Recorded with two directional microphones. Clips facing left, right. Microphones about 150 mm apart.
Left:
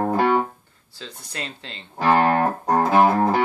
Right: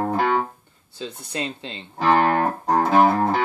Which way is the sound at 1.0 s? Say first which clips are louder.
Right 5 dB; 20° right (ahead or behind).